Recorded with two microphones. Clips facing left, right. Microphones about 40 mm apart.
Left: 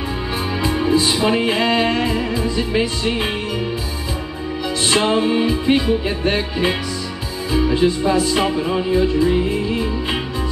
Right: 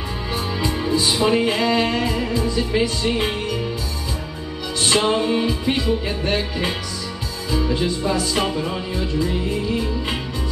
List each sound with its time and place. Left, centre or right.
0.6 s music: left
4.8 s music: centre